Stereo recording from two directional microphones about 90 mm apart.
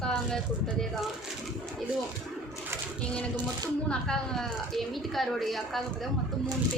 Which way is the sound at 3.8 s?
5° left (ahead or behind).